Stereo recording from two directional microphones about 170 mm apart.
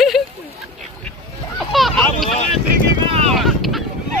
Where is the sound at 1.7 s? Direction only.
Centre (ahead or behind).